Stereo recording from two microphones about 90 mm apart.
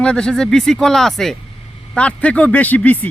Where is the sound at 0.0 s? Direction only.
10° left (ahead or behind).